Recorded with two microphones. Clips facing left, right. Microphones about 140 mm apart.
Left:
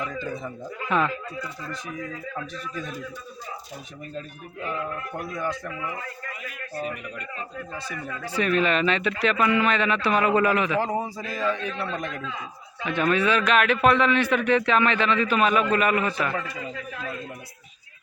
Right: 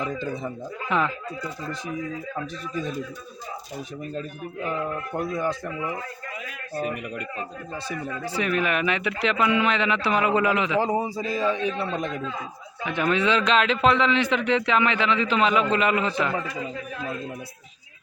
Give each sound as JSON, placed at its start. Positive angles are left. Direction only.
{"t": 0.0, "sound": "speech", "side_deg": -25}
{"t": 5.1, "sound": "speech", "side_deg": -30}
{"t": 8.0, "sound": "speech", "side_deg": -15}